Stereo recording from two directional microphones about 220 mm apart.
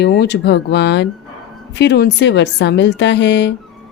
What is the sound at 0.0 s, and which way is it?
A woman's voice, 50° left (ahead or behind).